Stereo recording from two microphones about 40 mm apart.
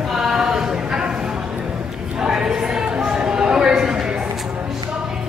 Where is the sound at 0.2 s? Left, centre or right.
Centre.